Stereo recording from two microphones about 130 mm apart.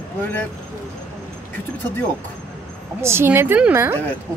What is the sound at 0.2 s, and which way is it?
Speech, 15° left (ahead or behind).